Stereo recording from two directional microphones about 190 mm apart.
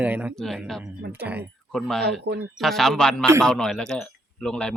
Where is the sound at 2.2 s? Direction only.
60° right (ahead or behind).